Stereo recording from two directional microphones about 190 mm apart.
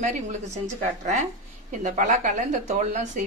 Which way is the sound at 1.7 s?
40° right (ahead or behind).